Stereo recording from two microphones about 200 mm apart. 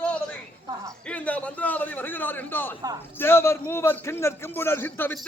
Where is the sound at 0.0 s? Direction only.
5° left (ahead or behind).